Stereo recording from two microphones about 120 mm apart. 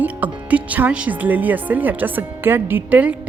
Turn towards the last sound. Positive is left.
turn(degrees=-10)  # may be behind; listen again after turning